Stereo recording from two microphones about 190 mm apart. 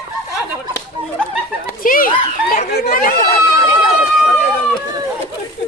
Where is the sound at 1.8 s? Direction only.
45° left (ahead or behind).